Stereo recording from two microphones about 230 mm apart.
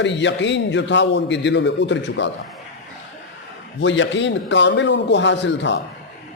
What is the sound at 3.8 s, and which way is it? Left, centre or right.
A man's voice, left.